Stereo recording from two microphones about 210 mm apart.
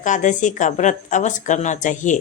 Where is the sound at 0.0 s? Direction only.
35° left (ahead or behind).